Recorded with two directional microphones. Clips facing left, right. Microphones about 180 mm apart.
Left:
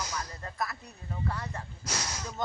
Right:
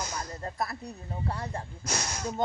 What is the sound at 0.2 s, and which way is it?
A woman's voice, 30° right (ahead or behind).